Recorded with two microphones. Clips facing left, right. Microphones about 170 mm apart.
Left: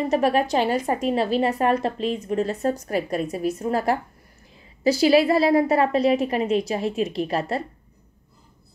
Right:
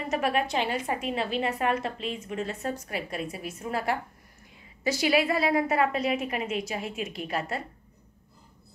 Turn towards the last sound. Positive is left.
turn(degrees=35)  # may be behind; listen again after turning